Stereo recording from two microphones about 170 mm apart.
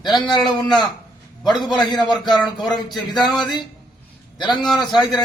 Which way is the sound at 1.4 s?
25° left (ahead or behind).